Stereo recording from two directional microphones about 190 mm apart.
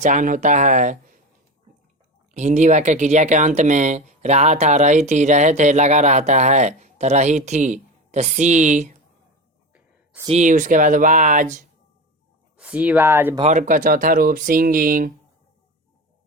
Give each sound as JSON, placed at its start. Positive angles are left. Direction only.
{"t": 0.0, "sound": "speech", "side_deg": -40}
{"t": 2.3, "sound": "speech", "side_deg": -35}
{"t": 9.7, "sound": "a sound", "side_deg": -5}
{"t": 10.2, "sound": "speech", "side_deg": -40}
{"t": 12.5, "sound": "speech", "side_deg": -5}
{"t": 13.4, "sound": "speech", "side_deg": -40}